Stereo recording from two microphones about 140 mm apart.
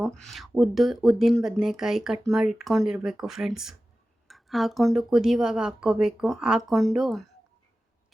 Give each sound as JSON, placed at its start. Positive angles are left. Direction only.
{"t": 0.0, "sound": "speech", "side_deg": 0}